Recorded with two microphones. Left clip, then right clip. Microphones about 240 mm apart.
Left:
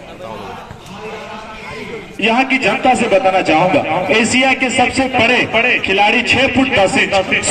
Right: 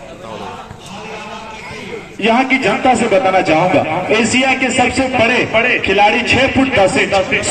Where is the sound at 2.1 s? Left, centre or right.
Left.